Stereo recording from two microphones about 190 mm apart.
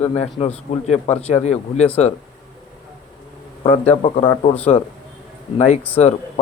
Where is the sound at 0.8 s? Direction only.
35° left (ahead or behind).